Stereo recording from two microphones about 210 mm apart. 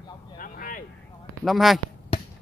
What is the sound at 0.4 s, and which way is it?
Vehicle, 40° left (ahead or behind).